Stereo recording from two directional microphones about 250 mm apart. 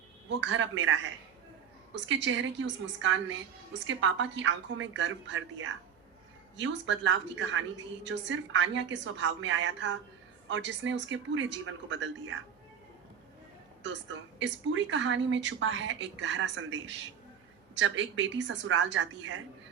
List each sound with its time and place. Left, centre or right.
0.3 s a woman's voice: right
2.0 s a woman's voice: right
13.8 s a woman's voice: right